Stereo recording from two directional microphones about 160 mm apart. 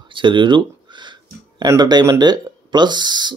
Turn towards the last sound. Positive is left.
turn(degrees=-25)  # may be behind; listen again after turning